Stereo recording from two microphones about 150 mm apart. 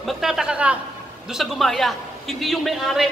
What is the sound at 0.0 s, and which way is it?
A man's voice, centre (ahead or behind).